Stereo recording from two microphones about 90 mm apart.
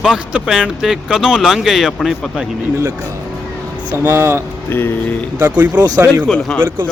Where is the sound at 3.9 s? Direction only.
30° right (ahead or behind).